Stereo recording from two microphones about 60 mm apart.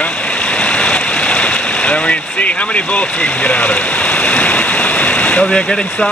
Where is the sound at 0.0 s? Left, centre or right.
Left.